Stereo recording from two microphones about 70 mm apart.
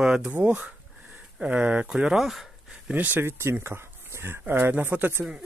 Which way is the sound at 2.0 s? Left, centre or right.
Centre.